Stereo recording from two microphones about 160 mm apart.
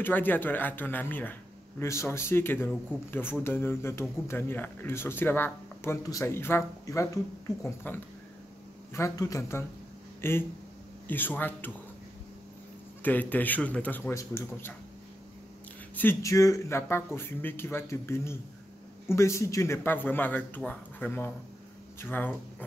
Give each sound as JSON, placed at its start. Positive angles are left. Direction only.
{"t": 0.0, "sound": "a man's voice", "side_deg": 10}
{"t": 13.0, "sound": "a man's voice", "side_deg": 10}
{"t": 16.0, "sound": "a man's voice", "side_deg": 15}